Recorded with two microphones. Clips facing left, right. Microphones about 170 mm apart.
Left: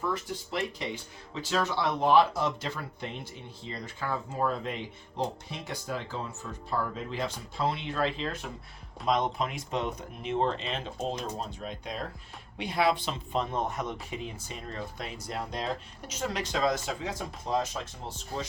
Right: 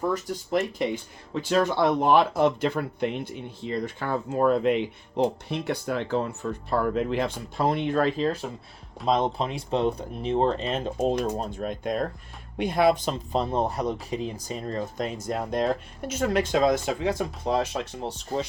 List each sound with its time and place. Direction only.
0.0 s speech: 40° right (ahead or behind)
1.3 s speech: 55° right (ahead or behind)
11.0 s speech: 60° right (ahead or behind)